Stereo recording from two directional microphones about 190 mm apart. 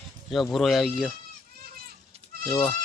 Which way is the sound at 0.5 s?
Centre (ahead or behind).